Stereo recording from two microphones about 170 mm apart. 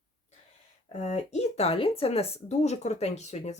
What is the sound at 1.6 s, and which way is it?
Speech, 35° left (ahead or behind).